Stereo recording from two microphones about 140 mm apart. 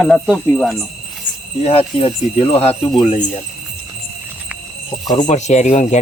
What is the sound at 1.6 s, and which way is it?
Speech, 45° left (ahead or behind).